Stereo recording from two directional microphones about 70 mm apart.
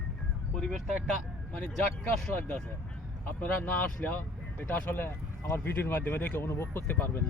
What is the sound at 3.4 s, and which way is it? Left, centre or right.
Speech, left.